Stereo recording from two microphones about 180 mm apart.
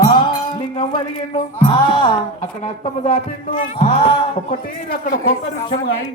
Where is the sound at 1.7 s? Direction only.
25° left (ahead or behind).